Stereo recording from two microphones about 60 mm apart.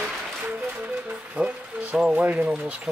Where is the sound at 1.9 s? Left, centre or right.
Centre.